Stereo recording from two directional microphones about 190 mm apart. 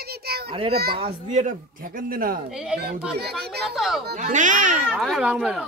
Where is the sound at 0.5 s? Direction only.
30° right (ahead or behind).